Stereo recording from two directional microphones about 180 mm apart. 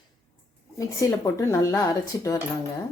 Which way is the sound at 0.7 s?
20° left (ahead or behind).